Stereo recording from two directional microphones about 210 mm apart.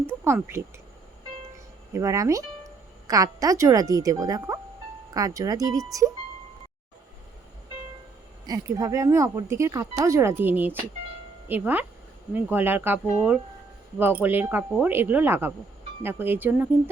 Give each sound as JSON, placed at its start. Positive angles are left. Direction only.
{"t": 0.1, "sound": "speech", "side_deg": -10}
{"t": 1.9, "sound": "speech", "side_deg": -15}
{"t": 8.4, "sound": "speech", "side_deg": -15}